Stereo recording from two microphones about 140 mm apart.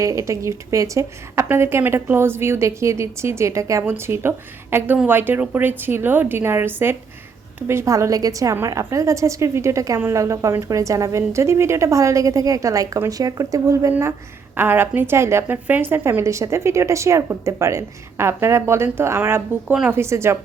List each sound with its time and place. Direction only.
0.0 s a woman's voice: 20° right (ahead or behind)